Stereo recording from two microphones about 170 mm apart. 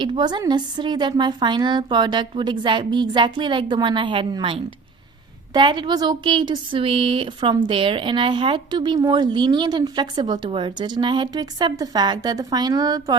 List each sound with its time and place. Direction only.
0.0 s speech: 25° right (ahead or behind)